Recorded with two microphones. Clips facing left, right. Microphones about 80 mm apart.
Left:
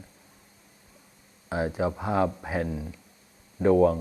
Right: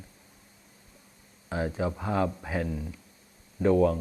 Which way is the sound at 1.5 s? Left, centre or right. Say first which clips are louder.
Left 3 dB; centre.